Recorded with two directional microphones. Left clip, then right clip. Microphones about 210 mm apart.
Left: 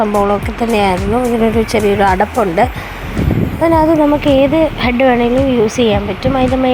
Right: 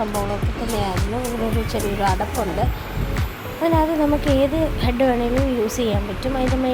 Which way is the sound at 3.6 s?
30° left (ahead or behind).